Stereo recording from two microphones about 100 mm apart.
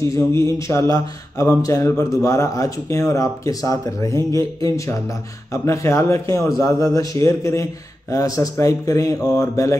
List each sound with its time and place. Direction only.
0.1 s speech: 30° left (ahead or behind)